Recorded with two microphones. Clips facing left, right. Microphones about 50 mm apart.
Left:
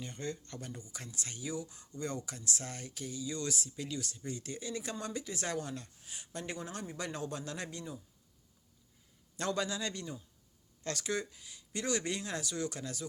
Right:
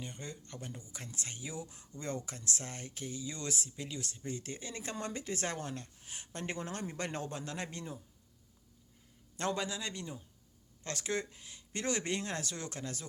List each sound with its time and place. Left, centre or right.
0.0 s speech: centre; by 7.9 s right
9.4 s a man's voice: right
10.8 s speech: right